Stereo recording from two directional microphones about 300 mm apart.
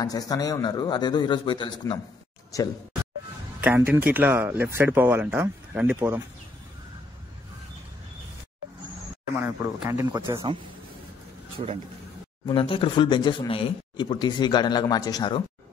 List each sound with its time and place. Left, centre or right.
0.0 s speech: centre
3.6 s speech: centre
9.4 s speech: centre
12.4 s speech: centre